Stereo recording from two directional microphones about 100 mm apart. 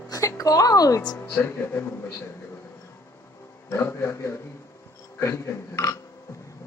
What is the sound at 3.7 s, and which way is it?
A woman's voice, 25° left (ahead or behind).